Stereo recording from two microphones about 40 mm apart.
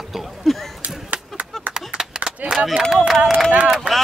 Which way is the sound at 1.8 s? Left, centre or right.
Centre.